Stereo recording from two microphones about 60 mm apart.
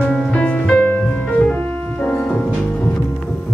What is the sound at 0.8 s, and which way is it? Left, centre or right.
Music, left.